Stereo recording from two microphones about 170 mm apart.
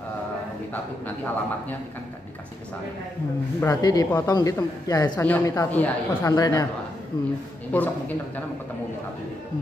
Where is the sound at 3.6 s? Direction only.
20° left (ahead or behind).